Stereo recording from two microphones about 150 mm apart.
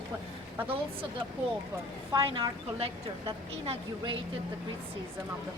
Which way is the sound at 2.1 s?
30° right (ahead or behind).